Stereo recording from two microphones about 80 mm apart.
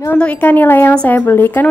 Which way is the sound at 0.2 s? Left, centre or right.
Left.